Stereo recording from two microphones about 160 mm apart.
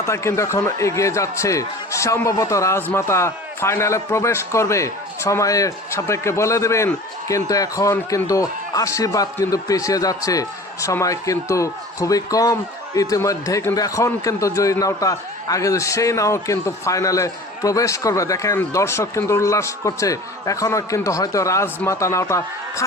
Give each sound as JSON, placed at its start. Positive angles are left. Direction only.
{"t": 0.0, "sound": "speech", "side_deg": 15}